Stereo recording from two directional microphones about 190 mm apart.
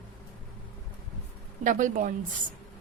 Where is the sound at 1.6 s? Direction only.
45° right (ahead or behind).